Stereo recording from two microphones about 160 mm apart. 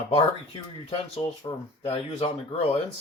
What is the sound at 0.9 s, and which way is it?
Speech, 40° left (ahead or behind).